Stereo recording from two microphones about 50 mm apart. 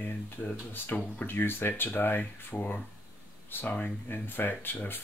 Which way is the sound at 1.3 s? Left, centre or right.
Left.